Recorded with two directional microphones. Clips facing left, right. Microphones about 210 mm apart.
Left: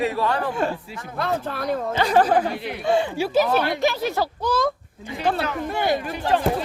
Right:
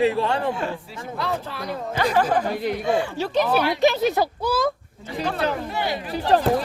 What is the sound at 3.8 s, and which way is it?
Speech, 20° right (ahead or behind).